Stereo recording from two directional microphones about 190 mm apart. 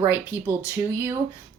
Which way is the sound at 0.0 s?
10° right (ahead or behind).